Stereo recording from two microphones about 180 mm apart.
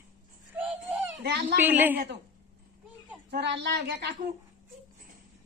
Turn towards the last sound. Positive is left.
turn(degrees=-65)  # may be behind; listen again after turning